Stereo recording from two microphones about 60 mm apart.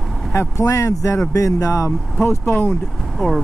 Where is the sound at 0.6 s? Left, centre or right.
Left.